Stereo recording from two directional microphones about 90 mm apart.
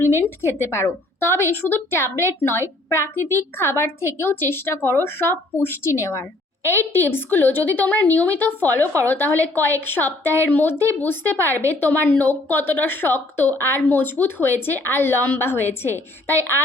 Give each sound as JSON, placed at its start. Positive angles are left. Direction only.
{"t": 0.2, "sound": "a woman's voice", "side_deg": 30}